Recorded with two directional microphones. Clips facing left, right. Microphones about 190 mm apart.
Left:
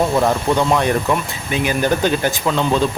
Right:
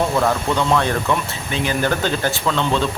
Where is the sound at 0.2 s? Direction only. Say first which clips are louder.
Left 3 dB; 15° left (ahead or behind).